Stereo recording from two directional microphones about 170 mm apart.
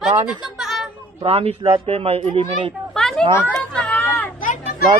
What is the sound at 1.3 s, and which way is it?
Speech, 35° right (ahead or behind).